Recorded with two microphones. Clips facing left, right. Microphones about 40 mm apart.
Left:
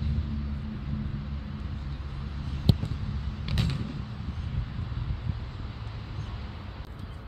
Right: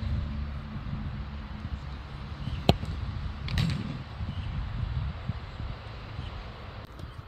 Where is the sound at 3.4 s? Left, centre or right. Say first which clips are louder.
Even; centre.